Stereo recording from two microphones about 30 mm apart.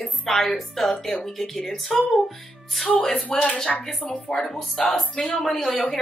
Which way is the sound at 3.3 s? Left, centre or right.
Left.